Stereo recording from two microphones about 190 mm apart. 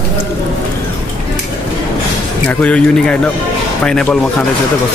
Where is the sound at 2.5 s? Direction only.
5° left (ahead or behind).